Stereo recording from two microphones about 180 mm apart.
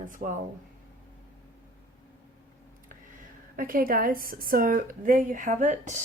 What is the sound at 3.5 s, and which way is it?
Speech, 50° right (ahead or behind).